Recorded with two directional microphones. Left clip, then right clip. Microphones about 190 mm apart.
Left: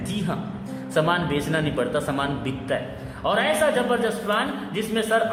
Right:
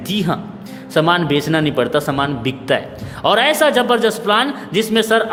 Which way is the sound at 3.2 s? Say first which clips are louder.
Right 8 dB; 50° right (ahead or behind).